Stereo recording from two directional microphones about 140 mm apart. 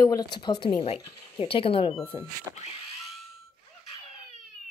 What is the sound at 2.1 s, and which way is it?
Speech, 55° left (ahead or behind).